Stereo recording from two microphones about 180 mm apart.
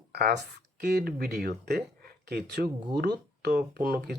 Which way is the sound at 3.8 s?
65° right (ahead or behind).